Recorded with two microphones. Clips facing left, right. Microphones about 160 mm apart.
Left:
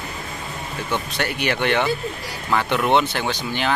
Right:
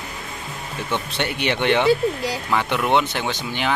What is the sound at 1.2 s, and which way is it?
Speech, 25° right (ahead or behind).